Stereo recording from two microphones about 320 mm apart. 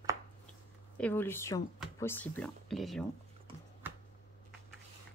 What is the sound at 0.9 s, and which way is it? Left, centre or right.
Speech, centre.